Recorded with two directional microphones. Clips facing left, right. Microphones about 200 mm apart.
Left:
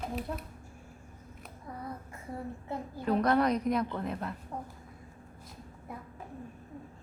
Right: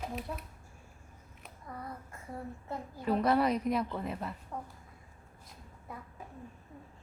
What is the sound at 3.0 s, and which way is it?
A woman's voice, 5° right (ahead or behind).